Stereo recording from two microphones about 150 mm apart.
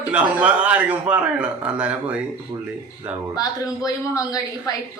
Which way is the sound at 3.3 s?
25° left (ahead or behind).